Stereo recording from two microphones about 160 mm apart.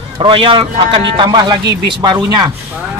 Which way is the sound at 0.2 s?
30° right (ahead or behind).